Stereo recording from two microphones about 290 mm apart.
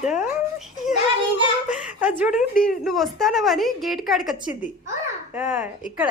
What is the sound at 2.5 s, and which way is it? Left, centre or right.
Speech, left.